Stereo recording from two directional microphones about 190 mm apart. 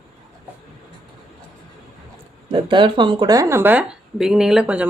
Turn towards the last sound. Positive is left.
turn(degrees=-5)  # may be behind; listen again after turning